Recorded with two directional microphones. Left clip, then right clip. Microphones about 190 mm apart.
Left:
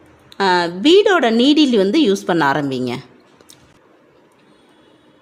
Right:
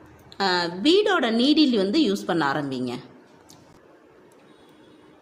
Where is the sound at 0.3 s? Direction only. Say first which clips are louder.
Left 8 dB; 45° left (ahead or behind).